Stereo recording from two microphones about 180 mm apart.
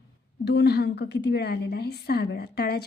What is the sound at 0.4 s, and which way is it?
A woman's voice, 70° left (ahead or behind).